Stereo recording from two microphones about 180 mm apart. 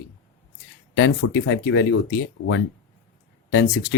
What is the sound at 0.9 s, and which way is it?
Speech, 80° left.